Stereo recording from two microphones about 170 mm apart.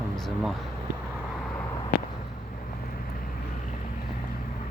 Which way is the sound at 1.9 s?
55° left (ahead or behind).